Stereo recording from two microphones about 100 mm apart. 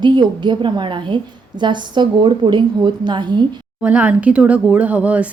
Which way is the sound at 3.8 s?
15° right (ahead or behind).